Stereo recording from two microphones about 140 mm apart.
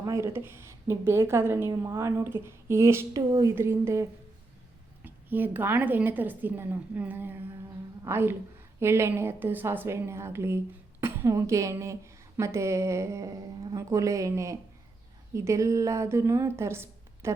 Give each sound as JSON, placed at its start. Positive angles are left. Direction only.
{"t": 0.0, "sound": "a woman's voice", "side_deg": -20}